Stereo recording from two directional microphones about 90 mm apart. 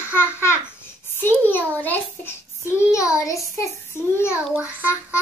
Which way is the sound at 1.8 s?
20° left (ahead or behind).